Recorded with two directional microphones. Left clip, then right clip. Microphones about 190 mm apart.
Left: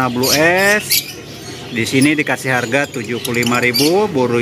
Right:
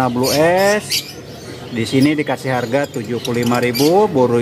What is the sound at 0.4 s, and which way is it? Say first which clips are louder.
Speech: left 1 dB; 10° right (ahead or behind).